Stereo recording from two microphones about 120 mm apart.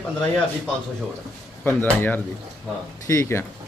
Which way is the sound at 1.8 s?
15° left (ahead or behind).